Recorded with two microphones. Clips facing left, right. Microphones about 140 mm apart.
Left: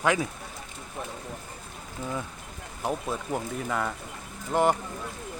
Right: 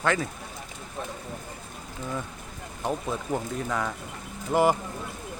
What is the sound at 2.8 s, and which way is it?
Speech, 5° left (ahead or behind).